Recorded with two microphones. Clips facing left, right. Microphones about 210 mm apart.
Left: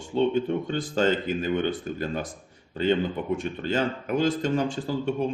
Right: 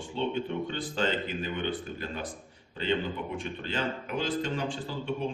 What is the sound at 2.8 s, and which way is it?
Speech, 45° left (ahead or behind).